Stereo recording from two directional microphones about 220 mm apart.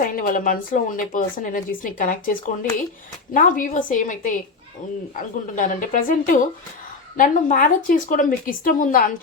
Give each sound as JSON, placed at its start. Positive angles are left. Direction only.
{"t": 0.0, "sound": "speech", "side_deg": 40}